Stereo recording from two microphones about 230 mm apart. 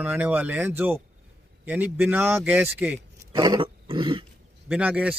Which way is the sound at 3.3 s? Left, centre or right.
Centre.